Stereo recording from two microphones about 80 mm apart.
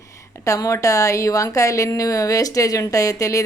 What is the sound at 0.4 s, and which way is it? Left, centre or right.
A woman's voice, left.